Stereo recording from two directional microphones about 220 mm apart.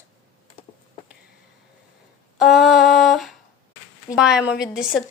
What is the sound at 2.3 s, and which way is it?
Humming, centre (ahead or behind).